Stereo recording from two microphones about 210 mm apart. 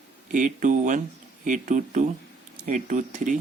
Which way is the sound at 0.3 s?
35° right (ahead or behind).